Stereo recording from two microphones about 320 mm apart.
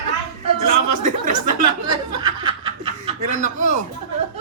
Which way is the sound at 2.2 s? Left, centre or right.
Centre.